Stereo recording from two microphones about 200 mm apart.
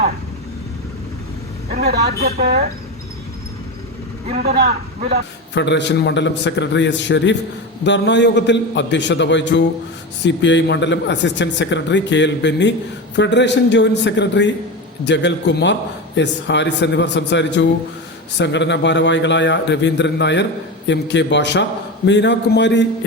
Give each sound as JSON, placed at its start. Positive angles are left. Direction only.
{"t": 1.9, "sound": "a woman's voice", "side_deg": -50}
{"t": 5.5, "sound": "a man's voice", "side_deg": 60}